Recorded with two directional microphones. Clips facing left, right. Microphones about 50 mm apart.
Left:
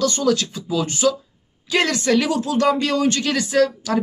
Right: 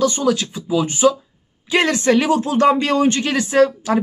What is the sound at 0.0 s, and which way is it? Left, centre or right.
Speech, centre.